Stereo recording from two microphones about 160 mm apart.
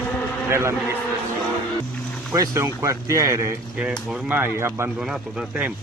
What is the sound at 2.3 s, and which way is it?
Speech, 20° right (ahead or behind).